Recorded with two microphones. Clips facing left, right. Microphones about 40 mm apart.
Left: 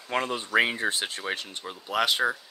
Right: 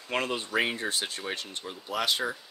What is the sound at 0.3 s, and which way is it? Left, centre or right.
Speech, centre.